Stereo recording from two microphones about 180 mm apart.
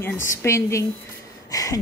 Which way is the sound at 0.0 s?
10° left (ahead or behind).